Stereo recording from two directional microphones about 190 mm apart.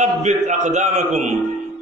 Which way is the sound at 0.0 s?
35° right (ahead or behind).